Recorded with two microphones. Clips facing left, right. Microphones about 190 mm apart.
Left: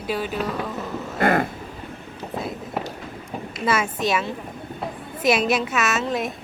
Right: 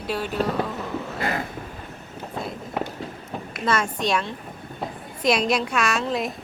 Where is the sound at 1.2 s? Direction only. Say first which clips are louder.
Left 9 dB; 55° left (ahead or behind).